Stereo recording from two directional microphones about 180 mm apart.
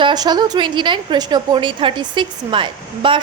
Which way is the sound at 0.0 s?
25° right (ahead or behind).